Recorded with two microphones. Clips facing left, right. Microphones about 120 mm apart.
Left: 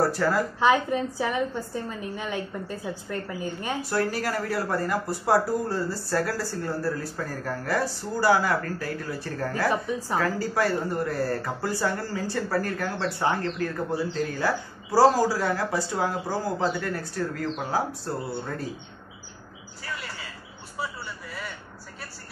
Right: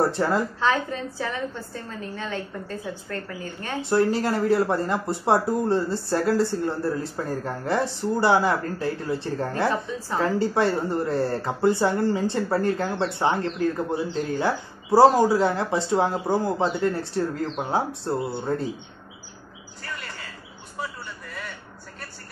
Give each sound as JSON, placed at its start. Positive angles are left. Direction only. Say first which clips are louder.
{"t": 0.0, "sound": "speech", "louder": "right 1 dB", "side_deg": -25}
{"t": 0.6, "sound": "a woman's voice", "louder": "left 2 dB", "side_deg": 15}
{"t": 3.8, "sound": "speech", "louder": "right 7 dB", "side_deg": -25}
{"t": 9.7, "sound": "a woman's voice", "louder": "even", "side_deg": 15}
{"t": 10.1, "sound": "speech", "louder": "right 4 dB", "side_deg": -25}
{"t": 19.8, "sound": "a sound", "louder": "even", "side_deg": 0}